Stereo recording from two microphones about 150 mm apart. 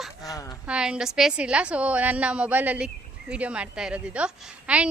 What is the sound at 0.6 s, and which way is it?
A woman's voice, 5° right (ahead or behind).